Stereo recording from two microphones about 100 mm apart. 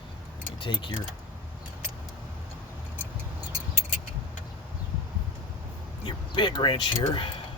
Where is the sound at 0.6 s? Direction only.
55° left (ahead or behind).